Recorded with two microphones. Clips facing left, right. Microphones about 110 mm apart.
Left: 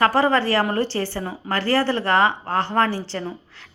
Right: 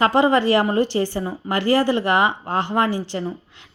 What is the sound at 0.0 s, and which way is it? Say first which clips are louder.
A woman's voice: right 2 dB; 20° right (ahead or behind).